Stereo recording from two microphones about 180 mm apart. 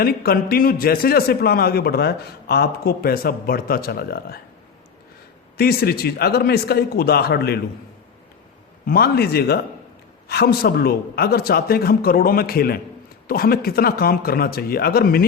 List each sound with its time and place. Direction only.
0.0 s a man's voice: 55° left (ahead or behind)
5.5 s a man's voice: 60° left (ahead or behind)
8.9 s a man's voice: 60° left (ahead or behind)